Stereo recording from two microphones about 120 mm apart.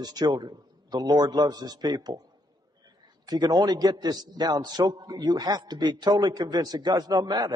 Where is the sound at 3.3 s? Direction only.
35° right (ahead or behind).